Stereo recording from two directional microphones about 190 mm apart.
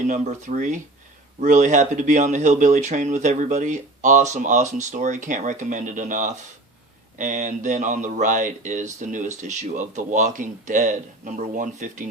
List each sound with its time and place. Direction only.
0.1 s speech: 40° right (ahead or behind)